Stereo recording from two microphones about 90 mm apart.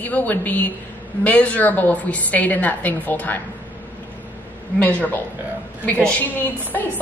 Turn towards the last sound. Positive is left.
turn(degrees=20)  # may be behind; listen again after turning